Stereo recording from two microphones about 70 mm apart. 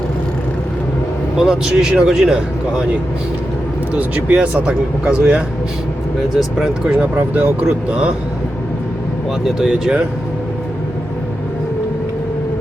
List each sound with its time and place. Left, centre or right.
1.4 s speech: centre
3.9 s speech: centre
6.6 s speech: centre
7.2 s speech: right
9.6 s speech: centre